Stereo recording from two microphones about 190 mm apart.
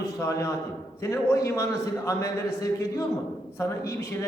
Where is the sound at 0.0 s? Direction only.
15° left (ahead or behind).